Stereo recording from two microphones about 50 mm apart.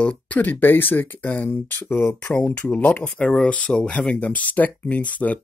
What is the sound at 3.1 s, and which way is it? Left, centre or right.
Speech, centre.